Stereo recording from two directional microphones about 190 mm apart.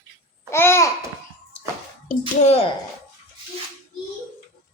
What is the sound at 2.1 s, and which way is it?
Speech, 35° left (ahead or behind).